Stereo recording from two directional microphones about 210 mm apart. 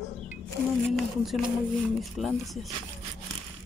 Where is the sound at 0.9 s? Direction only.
Centre (ahead or behind).